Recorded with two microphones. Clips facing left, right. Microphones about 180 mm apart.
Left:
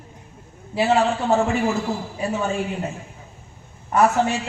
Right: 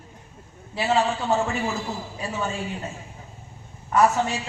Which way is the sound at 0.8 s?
55° left (ahead or behind).